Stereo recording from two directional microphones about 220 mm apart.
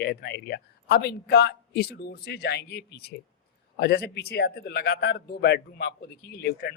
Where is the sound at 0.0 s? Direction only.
50° left (ahead or behind).